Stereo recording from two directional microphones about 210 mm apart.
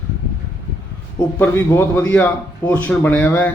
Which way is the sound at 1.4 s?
10° left (ahead or behind).